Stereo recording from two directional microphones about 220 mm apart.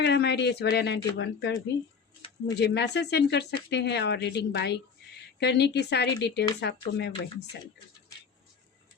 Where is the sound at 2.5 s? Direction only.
50° left (ahead or behind).